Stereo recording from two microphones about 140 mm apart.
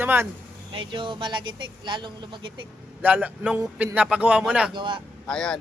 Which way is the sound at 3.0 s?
10° right (ahead or behind).